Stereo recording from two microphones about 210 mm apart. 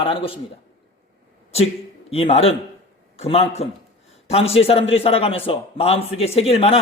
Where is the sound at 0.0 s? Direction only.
25° left (ahead or behind).